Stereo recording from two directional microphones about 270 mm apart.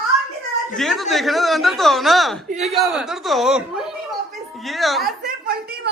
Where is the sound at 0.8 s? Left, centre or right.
Centre.